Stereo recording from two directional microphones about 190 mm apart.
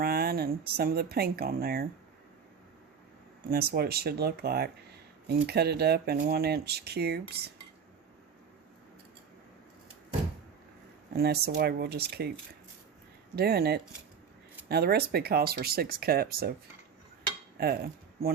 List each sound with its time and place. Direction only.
0.0 s speech: 55° right (ahead or behind)
3.5 s speech: 55° right (ahead or behind)
11.1 s speech: 55° right (ahead or behind)
13.3 s speech: 55° right (ahead or behind)
17.6 s speech: 55° right (ahead or behind)